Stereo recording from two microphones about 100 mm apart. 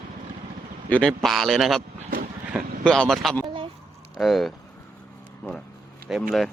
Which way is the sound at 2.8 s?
5° left (ahead or behind).